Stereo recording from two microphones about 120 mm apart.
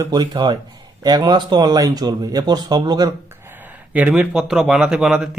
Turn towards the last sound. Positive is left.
turn(degrees=-5)  # may be behind; listen again after turning